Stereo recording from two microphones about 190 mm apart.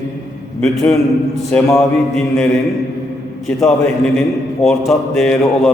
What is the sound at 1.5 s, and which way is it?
Speech, 5° left (ahead or behind).